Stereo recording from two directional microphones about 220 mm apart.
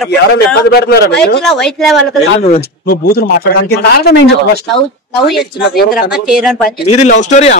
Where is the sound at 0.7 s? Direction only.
45° left (ahead or behind).